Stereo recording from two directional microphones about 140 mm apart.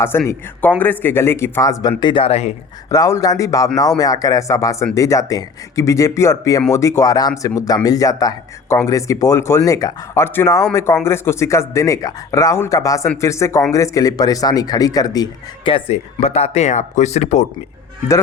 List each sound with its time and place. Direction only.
0.1 s a man's voice: 15° left (ahead or behind)
1.9 s speech: 35° left (ahead or behind)
2.9 s speech: 25° left (ahead or behind)
15.7 s speech: 50° left (ahead or behind)